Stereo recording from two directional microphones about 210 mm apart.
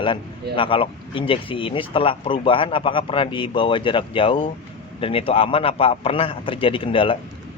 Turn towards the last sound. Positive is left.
turn(degrees=25)  # may be behind; listen again after turning